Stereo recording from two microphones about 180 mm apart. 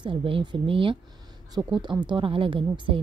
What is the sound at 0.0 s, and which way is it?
Speech, 30° right (ahead or behind).